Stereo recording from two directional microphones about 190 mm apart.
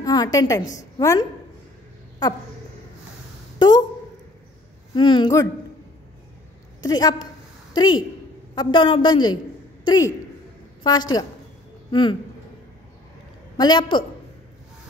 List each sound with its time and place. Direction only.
0.0 s a woman's voice: 20° left (ahead or behind)
3.5 s speech: 20° left (ahead or behind)
4.9 s a woman's voice: 25° left (ahead or behind)
6.8 s a woman's voice: 20° left (ahead or behind)
13.6 s a woman's voice: 25° left (ahead or behind)